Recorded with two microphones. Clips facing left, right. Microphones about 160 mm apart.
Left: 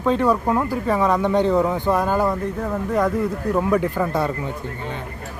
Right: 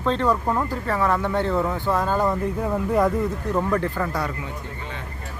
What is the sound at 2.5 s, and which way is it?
Speech, 10° right (ahead or behind).